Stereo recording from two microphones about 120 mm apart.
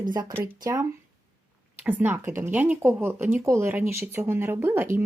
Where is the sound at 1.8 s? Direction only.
15° right (ahead or behind).